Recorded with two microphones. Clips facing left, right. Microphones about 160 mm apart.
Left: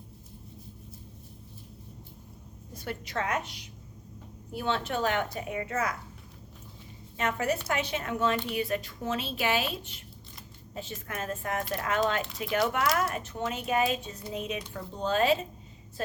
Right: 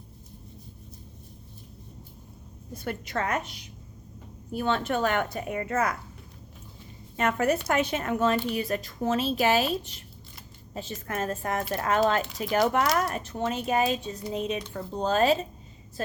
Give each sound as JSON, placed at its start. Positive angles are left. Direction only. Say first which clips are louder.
{"t": 2.7, "sound": "a woman's voice", "louder": "right 3 dB", "side_deg": -50}
{"t": 4.5, "sound": "a woman's voice", "louder": "right 4 dB", "side_deg": -50}
{"t": 7.2, "sound": "a woman's voice", "louder": "right 4 dB", "side_deg": -50}